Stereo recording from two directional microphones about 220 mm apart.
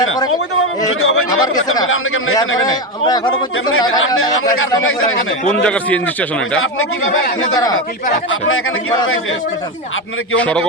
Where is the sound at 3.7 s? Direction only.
65° left (ahead or behind).